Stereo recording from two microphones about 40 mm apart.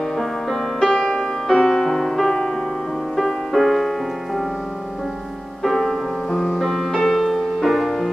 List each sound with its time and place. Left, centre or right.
0.7 s music: centre
5.6 s music: centre